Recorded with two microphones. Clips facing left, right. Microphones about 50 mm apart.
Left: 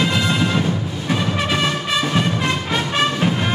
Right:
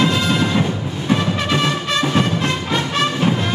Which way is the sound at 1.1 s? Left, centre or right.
Centre.